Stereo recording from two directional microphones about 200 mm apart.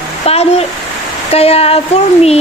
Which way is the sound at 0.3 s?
30° left (ahead or behind).